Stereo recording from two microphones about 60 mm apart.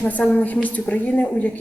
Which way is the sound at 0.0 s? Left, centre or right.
Left.